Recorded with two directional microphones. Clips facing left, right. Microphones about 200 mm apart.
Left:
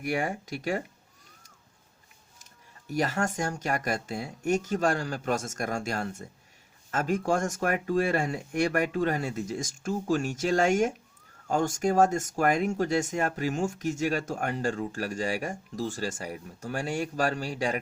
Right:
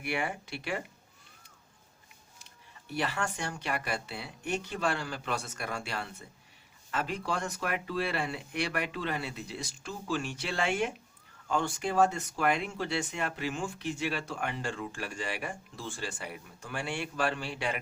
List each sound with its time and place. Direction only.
0.0 s speech: 45° left (ahead or behind)
2.4 s speech: 40° left (ahead or behind)